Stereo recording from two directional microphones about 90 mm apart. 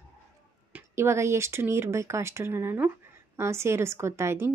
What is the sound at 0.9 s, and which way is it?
Speech, 30° right (ahead or behind).